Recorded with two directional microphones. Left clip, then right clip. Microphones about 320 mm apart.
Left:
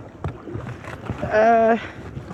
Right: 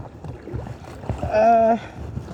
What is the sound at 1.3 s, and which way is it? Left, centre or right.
Speech, right.